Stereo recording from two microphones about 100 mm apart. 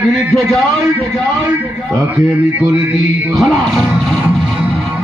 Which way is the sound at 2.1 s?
20° right (ahead or behind).